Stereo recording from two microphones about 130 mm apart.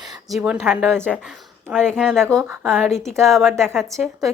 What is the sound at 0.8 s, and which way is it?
A woman's voice, 5° left (ahead or behind).